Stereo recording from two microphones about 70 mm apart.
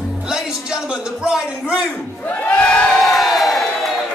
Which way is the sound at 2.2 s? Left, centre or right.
Centre.